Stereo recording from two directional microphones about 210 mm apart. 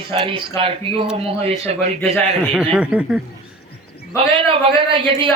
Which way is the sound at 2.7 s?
5° right (ahead or behind).